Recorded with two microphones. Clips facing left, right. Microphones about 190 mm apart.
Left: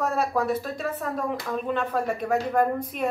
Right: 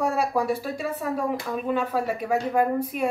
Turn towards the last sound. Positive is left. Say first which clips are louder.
# right 1 dB
turn(degrees=-10)  # may be behind; listen again after turning